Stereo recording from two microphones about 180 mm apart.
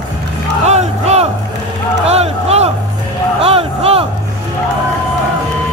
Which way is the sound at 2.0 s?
35° right (ahead or behind).